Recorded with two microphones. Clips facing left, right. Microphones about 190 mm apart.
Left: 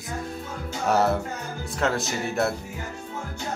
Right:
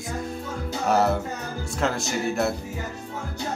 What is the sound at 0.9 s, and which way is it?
Speech, centre (ahead or behind).